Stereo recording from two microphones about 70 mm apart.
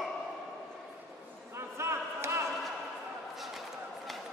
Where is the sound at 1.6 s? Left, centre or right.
Right.